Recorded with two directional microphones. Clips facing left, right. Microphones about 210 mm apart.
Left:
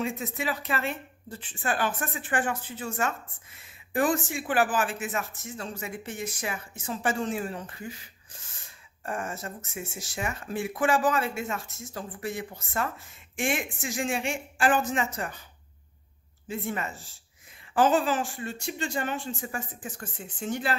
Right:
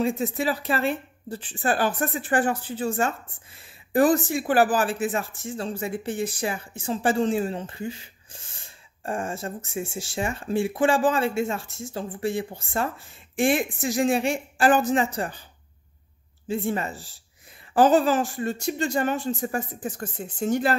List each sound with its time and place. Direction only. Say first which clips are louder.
0.0 s speech: right 7 dB; 35° right (ahead or behind)
16.4 s speech: right 6 dB; 30° right (ahead or behind)